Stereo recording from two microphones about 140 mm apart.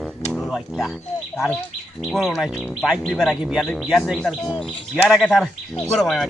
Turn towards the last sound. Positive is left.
turn(degrees=0)  # may be behind; listen again after turning